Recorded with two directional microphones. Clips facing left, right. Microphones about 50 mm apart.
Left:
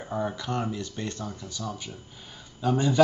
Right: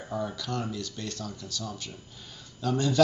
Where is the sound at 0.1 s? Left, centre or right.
Left.